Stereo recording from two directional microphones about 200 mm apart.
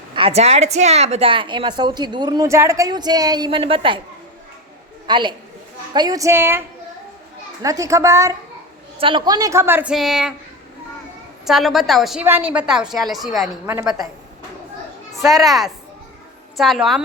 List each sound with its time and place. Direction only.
0.1 s a woman's voice: 25° right (ahead or behind)
5.0 s a man's voice: 25° right (ahead or behind)
7.6 s a woman's voice: 15° right (ahead or behind); by 10.3 s centre (ahead or behind)
11.4 s a woman's voice: centre (ahead or behind)
15.3 s a woman's voice: centre (ahead or behind)